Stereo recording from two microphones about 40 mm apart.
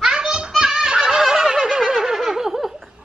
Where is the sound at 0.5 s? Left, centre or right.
Centre.